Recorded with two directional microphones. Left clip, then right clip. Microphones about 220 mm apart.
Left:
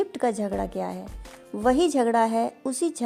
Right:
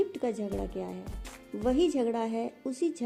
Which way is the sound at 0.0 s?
45° left (ahead or behind).